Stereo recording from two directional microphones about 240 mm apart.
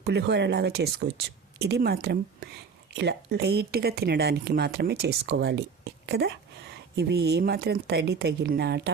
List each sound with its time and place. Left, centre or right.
0.1 s a woman's voice: right